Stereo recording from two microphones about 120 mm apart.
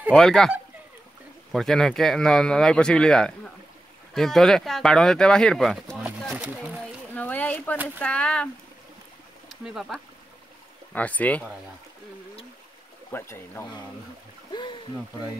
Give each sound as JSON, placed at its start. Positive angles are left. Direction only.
{"t": 0.1, "sound": "speech", "side_deg": 5}
{"t": 1.5, "sound": "speech", "side_deg": 0}
{"t": 6.3, "sound": "speech", "side_deg": -10}
{"t": 7.2, "sound": "speech", "side_deg": 15}
{"t": 7.7, "sound": "speech", "side_deg": -15}
{"t": 8.0, "sound": "speech", "side_deg": 10}
{"t": 9.5, "sound": "speech", "side_deg": 0}
{"t": 10.9, "sound": "speech", "side_deg": 10}
{"t": 13.1, "sound": "speech", "side_deg": 20}
{"t": 14.5, "sound": "a sound", "side_deg": 40}